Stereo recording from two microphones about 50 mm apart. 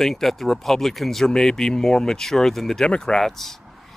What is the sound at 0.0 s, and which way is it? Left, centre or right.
Speech, centre.